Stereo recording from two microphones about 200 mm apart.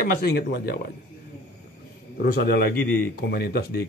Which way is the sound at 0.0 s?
50° left (ahead or behind).